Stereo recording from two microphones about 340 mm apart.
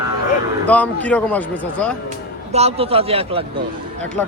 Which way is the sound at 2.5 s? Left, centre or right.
Centre.